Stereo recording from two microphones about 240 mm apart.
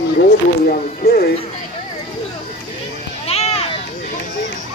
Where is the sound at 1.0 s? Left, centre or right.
Left.